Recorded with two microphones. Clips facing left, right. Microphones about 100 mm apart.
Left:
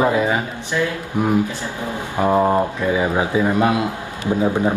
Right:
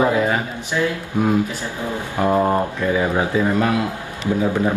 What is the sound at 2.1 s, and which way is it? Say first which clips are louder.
Speech: left 2 dB; 15° left (ahead or behind).